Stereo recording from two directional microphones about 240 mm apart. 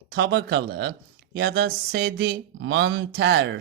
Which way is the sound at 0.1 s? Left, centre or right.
Right.